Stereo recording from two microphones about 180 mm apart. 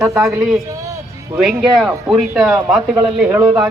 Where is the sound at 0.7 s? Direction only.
15° right (ahead or behind).